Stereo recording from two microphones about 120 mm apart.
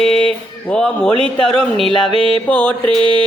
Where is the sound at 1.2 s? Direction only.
5° left (ahead or behind).